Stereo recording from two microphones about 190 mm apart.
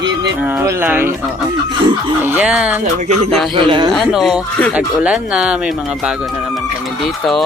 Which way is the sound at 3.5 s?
25° right (ahead or behind).